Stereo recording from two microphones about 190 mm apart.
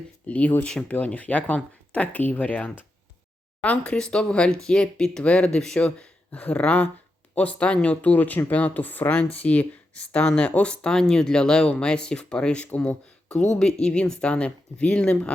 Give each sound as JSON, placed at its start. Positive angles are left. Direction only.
{"t": 0.3, "sound": "speech", "side_deg": 5}
{"t": 13.3, "sound": "speech", "side_deg": 35}
{"t": 13.6, "sound": "speech", "side_deg": 5}